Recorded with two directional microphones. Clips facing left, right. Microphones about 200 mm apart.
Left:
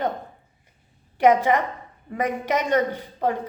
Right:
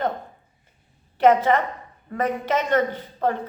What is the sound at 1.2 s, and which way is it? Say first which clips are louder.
A woman's voice: right 1 dB; 15° left (ahead or behind).